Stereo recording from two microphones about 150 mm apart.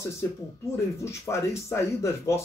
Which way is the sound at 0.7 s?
20° left (ahead or behind).